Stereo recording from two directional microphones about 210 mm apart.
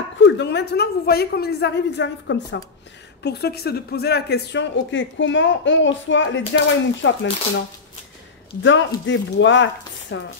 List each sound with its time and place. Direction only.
0.2 s a woman's voice: 55° left (ahead or behind)
8.6 s speech: 60° left (ahead or behind)